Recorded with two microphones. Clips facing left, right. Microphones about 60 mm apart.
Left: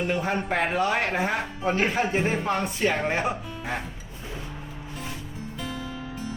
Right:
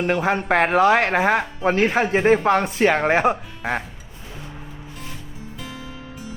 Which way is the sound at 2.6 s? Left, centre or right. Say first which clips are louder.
Right 7 dB; right.